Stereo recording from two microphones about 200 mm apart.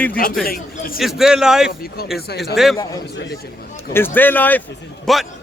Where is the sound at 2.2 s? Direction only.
55° left (ahead or behind).